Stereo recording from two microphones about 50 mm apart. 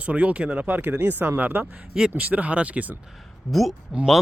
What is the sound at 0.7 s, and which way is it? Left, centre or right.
Speech, right.